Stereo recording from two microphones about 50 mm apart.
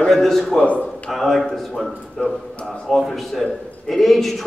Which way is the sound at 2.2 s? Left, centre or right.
Centre.